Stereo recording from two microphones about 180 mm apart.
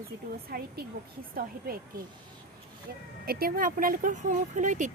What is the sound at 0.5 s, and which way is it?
A woman's voice, 55° right (ahead or behind).